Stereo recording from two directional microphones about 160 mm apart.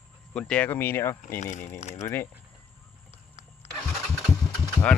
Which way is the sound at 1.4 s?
50° left (ahead or behind).